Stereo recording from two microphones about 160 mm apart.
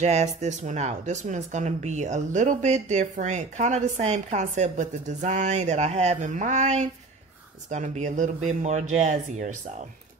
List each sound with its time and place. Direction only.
0.0 s speech: 45° right (ahead or behind)